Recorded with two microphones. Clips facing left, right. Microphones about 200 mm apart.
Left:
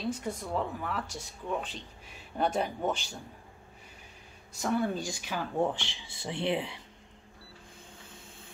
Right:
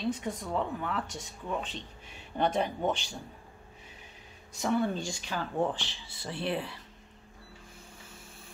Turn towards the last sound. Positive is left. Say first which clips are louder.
# left 2 dB
turn(degrees=15)  # may be behind; listen again after turning